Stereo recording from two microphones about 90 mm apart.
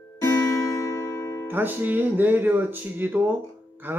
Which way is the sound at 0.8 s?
35° left (ahead or behind).